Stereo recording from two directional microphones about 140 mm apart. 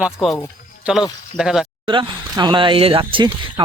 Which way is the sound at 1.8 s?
35° right (ahead or behind).